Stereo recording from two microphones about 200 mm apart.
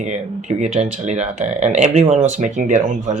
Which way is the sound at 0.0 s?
35° right (ahead or behind).